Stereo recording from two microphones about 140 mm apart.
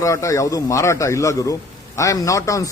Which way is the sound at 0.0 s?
20° left (ahead or behind).